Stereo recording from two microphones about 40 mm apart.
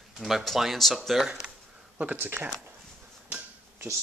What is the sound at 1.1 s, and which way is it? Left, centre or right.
Speech, centre.